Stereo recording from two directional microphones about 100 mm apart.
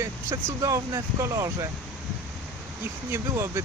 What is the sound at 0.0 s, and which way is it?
Speech, 30° right (ahead or behind).